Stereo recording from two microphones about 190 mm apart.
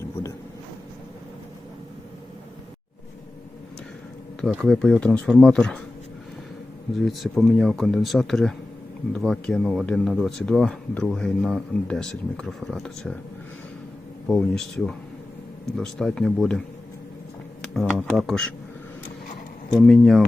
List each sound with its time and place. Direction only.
4.4 s speech: centre (ahead or behind)
7.0 s speech: centre (ahead or behind)
14.3 s speech: 5° left (ahead or behind)
17.6 s speech: centre (ahead or behind)
19.8 s speech: centre (ahead or behind)